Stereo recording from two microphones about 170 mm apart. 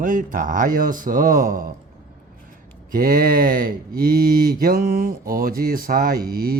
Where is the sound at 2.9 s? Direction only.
60° right (ahead or behind).